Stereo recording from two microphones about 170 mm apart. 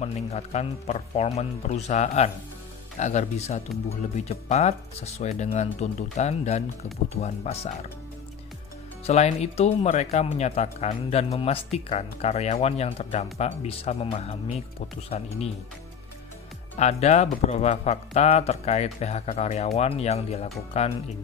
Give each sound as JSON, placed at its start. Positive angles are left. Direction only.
{"t": 0.0, "sound": "speech", "side_deg": 40}
{"t": 9.0, "sound": "speech", "side_deg": 40}
{"t": 16.7, "sound": "speech", "side_deg": 40}